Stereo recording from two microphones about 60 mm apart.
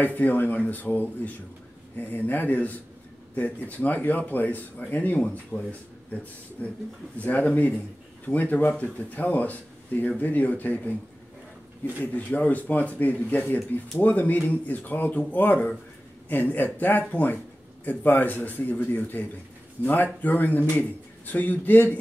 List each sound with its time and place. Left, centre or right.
0.0 s speech: left
7.2 s speech: left
12.0 s a man's voice: left